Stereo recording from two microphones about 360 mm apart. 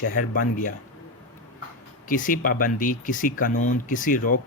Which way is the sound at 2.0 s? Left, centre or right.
Left.